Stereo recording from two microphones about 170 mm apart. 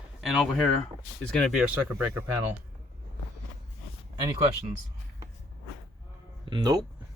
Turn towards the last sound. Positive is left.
turn(degrees=-25)  # may be behind; listen again after turning